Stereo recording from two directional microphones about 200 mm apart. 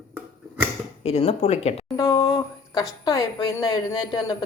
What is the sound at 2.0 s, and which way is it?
Speech, 15° left (ahead or behind).